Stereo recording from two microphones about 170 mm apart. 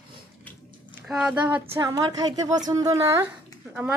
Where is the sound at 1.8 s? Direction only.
20° right (ahead or behind).